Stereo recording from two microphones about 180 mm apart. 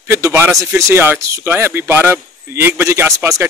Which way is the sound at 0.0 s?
15° right (ahead or behind).